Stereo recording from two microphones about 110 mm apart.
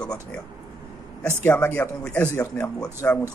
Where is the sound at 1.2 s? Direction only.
20° left (ahead or behind).